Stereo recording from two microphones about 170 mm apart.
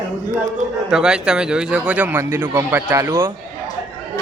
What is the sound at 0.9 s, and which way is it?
Speech, 5° right (ahead or behind).